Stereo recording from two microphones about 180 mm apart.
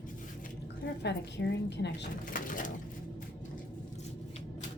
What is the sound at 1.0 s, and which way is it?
Speech, 70° left (ahead or behind).